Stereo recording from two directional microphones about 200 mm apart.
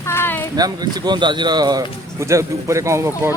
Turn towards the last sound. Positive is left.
turn(degrees=-15)  # may be behind; listen again after turning